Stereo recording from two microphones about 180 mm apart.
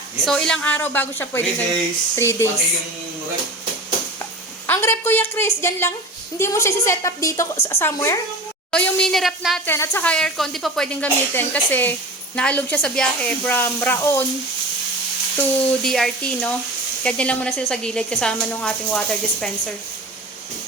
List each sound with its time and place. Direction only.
0.3 s speech: 5° left (ahead or behind)
4.2 s a woman's voice: 15° left (ahead or behind)
8.7 s a woman's voice: 5° left (ahead or behind)
9.6 s speech: 15° left (ahead or behind)
15.4 s a woman's voice: 5° left (ahead or behind)